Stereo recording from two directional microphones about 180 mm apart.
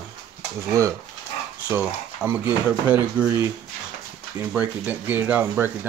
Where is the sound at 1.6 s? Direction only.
10° right (ahead or behind).